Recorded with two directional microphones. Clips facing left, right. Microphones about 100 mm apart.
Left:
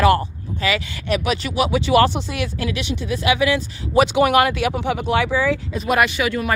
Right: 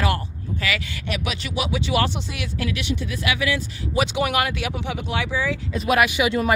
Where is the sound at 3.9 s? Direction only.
50° left (ahead or behind).